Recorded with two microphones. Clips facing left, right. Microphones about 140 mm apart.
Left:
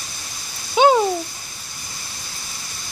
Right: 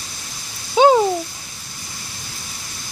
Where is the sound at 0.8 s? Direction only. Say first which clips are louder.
Right 2 dB; 35° right (ahead or behind).